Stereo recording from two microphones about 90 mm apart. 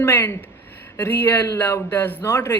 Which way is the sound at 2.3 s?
35° left (ahead or behind).